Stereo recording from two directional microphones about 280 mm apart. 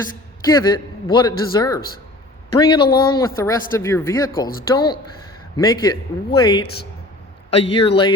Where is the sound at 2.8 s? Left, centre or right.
Left.